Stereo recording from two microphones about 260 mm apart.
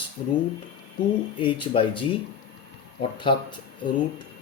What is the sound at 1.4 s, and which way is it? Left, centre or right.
Speech, centre.